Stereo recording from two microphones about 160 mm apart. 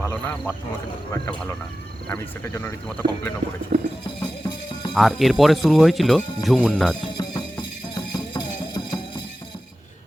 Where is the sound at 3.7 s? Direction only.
50° right (ahead or behind).